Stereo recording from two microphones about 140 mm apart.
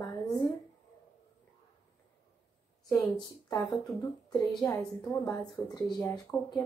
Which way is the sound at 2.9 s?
25° left (ahead or behind).